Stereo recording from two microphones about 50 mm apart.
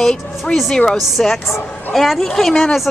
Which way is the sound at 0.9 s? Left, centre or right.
Centre.